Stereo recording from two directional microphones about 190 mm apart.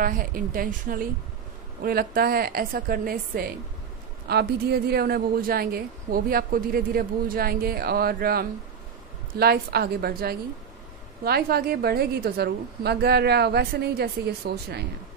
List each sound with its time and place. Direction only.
0.0 s a woman's voice: 50° right (ahead or behind)